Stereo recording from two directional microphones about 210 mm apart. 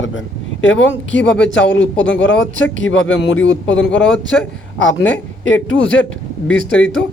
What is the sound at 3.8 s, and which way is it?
Speech, 5° left (ahead or behind).